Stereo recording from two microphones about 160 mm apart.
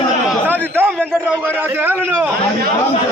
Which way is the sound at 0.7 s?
15° right (ahead or behind).